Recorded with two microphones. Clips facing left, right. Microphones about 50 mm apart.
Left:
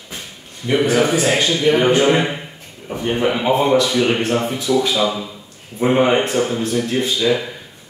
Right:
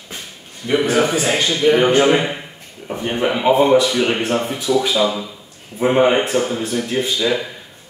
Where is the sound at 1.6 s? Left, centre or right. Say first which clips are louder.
Right 3 dB; centre.